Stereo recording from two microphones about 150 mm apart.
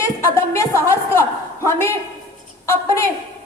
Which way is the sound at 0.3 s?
20° left (ahead or behind).